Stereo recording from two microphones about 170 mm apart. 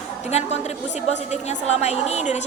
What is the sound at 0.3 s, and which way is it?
A woman's voice, 40° left (ahead or behind).